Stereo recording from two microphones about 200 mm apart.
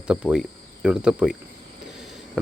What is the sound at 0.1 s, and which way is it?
Speech, 5° right (ahead or behind).